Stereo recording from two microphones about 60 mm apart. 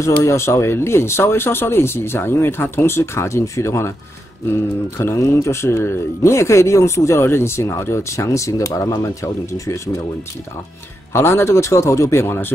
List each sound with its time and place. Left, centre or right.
0.0 s speech: left
11.1 s speech: left